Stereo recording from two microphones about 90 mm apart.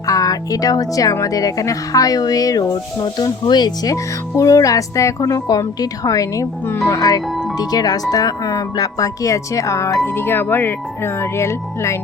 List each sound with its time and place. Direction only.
0.0 s speech: 40° left (ahead or behind)
3.9 s speech: 40° left (ahead or behind)
10.2 s speech: 25° left (ahead or behind)